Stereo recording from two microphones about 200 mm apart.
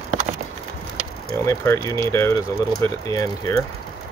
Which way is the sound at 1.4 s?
15° left (ahead or behind).